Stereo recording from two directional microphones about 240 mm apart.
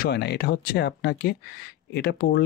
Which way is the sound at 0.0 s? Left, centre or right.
Left.